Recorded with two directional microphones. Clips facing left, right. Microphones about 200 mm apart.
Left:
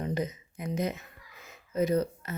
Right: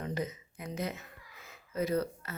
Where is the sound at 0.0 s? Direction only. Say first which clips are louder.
Left 4 dB; 20° left (ahead or behind).